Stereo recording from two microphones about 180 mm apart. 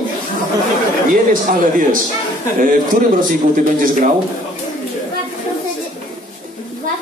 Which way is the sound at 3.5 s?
50° right (ahead or behind).